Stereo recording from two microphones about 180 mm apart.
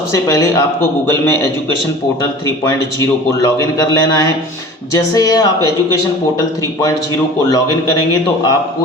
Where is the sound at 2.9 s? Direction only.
15° left (ahead or behind).